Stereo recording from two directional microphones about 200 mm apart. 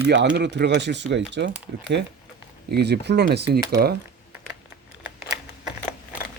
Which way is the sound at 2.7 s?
55° right (ahead or behind).